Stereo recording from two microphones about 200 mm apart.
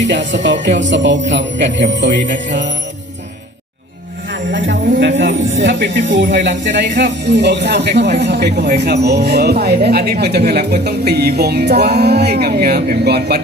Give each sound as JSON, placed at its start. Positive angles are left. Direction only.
{"t": 0.1, "sound": "speech", "side_deg": -65}
{"t": 4.3, "sound": "speech", "side_deg": -65}